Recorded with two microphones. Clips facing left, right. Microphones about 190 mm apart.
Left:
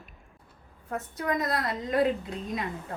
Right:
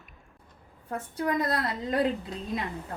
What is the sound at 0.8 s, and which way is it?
Speech, 30° right (ahead or behind).